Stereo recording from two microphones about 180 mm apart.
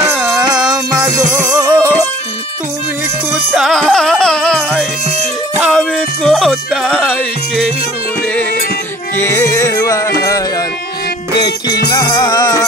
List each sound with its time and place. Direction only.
0.6 s music: 5° right (ahead or behind)
1.4 s music: 15° right (ahead or behind)
3.5 s music: centre (ahead or behind)
9.1 s music: 15° left (ahead or behind)